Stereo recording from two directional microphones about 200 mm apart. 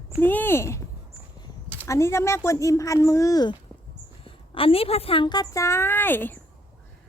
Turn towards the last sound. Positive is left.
turn(degrees=10)  # may be behind; listen again after turning